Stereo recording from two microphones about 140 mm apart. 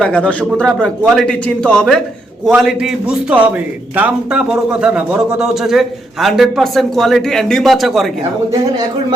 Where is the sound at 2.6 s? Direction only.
5° right (ahead or behind).